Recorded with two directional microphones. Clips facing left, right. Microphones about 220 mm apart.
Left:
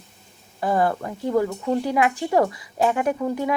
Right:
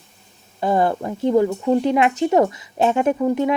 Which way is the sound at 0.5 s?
25° right (ahead or behind).